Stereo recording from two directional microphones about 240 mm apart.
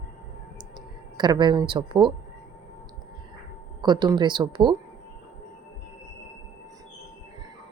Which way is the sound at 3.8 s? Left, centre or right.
Centre.